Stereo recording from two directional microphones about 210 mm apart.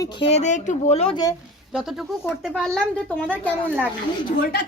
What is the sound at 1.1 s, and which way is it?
Speech, 15° left (ahead or behind).